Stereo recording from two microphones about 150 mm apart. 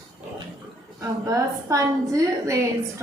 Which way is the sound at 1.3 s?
20° right (ahead or behind).